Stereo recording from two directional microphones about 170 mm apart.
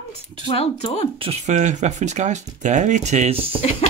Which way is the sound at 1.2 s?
40° right (ahead or behind).